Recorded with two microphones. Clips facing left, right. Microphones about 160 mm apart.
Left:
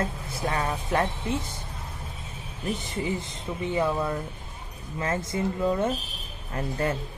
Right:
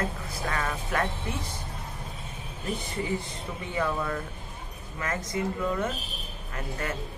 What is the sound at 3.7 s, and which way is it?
Speech, 25° left (ahead or behind).